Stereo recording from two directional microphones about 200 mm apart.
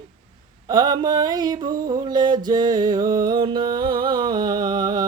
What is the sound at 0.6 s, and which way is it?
Mantra, 20° right (ahead or behind).